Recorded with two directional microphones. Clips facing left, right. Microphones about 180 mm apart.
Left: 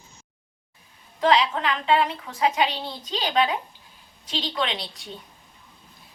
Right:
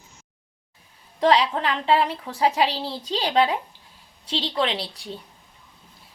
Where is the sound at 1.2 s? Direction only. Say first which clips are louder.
Right 1 dB; 35° right (ahead or behind).